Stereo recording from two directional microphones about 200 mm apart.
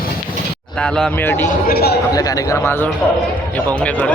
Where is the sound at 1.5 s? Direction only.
45° left (ahead or behind).